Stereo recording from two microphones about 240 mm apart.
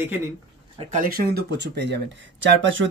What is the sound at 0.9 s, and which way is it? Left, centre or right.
Speech, right.